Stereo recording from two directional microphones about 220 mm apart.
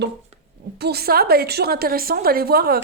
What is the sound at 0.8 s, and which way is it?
Speech, 45° right (ahead or behind).